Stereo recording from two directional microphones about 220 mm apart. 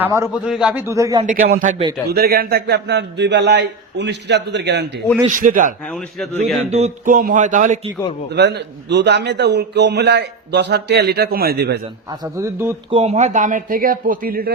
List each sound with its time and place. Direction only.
0.0 s speech: 10° right (ahead or behind)
1.2 s a man's voice: 35° right (ahead or behind)
5.2 s speech: 35° right (ahead or behind)
5.9 s a man's voice: centre (ahead or behind)
6.7 s speech: 30° right (ahead or behind)
8.3 s a man's voice: 50° right (ahead or behind)
12.2 s speech: 10° right (ahead or behind)
12.9 s speech: 30° right (ahead or behind)